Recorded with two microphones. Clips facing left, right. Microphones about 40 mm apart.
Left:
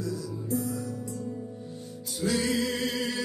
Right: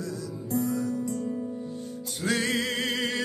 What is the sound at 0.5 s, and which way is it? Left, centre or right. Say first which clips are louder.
Music: right 4 dB; right.